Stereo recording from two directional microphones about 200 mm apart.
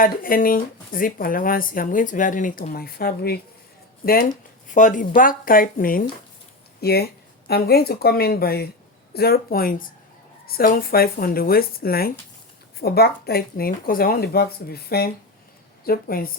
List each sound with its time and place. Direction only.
0.0 s speech: 45° left (ahead or behind)